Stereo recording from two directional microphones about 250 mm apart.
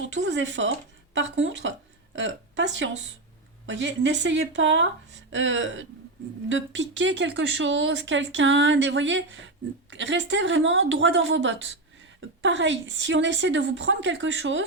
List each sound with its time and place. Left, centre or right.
0.0 s a woman's voice: right